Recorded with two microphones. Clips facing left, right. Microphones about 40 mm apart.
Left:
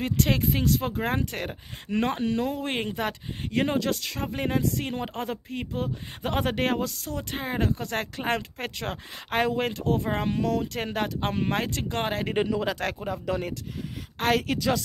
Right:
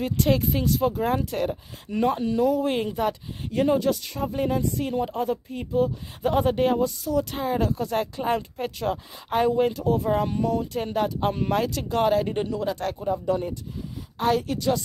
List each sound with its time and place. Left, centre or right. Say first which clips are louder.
0.0 s speech: right 2 dB; left
1.9 s speech: right 2 dB; left
4.3 s speech: right 2 dB; left
4.6 s speech: right 3 dB; left
7.2 s speech: right 5 dB; left
10.3 s speech: right 2 dB; left
11.1 s speech: right 3 dB; left
13.0 s speech: right 4 dB; left
14.1 s a woman's voice: right 1 dB; left